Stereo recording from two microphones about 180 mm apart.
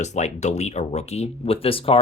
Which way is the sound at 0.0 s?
40° left (ahead or behind).